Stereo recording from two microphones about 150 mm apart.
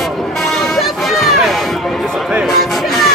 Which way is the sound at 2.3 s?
5° right (ahead or behind).